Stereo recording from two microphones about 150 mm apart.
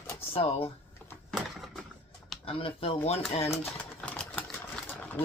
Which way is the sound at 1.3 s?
Centre (ahead or behind).